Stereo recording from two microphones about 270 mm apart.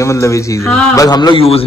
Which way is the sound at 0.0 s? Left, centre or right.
Centre.